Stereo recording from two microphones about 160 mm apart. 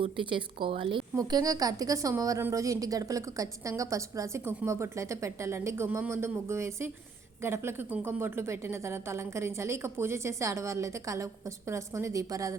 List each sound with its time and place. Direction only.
0.0 s speech: 30° right (ahead or behind)
1.1 s a woman's voice: 20° right (ahead or behind)